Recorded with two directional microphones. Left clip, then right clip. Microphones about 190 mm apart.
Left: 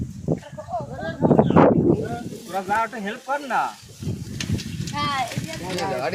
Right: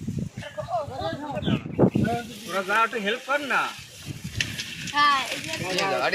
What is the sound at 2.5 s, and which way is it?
A man's voice, 55° left (ahead or behind).